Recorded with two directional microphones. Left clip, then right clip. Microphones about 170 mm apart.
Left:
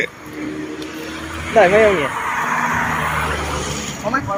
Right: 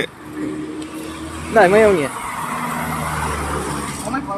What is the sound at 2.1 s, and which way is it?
Vehicle, 80° right.